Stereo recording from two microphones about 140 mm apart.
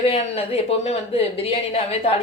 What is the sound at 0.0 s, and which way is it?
A woman's voice, 45° left (ahead or behind).